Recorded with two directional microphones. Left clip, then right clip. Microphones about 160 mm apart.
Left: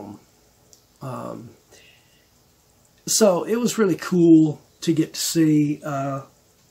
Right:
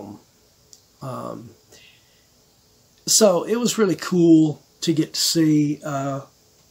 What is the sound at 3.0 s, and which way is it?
Speech, 5° right (ahead or behind).